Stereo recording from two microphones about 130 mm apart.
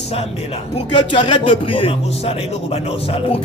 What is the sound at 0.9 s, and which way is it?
Music, 40° left (ahead or behind).